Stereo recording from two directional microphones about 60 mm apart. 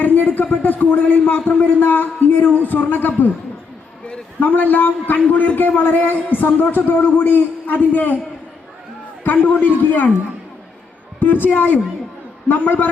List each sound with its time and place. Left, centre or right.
0.0 s a sound: left
1.5 s a man's voice: left
9.2 s speech: left
11.2 s speech: left